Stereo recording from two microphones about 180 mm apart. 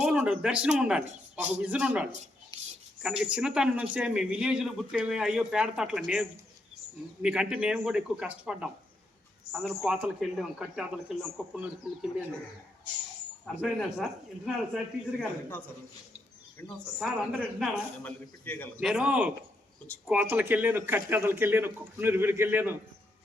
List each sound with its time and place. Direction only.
0.0 s a man's voice: 5° right (ahead or behind)
13.4 s a man's voice: centre (ahead or behind)
15.2 s a man's voice: 10° left (ahead or behind)
17.0 s a man's voice: 5° right (ahead or behind)
18.0 s a man's voice: 10° left (ahead or behind)
18.8 s a man's voice: 5° right (ahead or behind)